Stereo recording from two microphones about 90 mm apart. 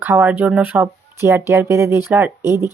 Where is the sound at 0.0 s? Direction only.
25° right (ahead or behind).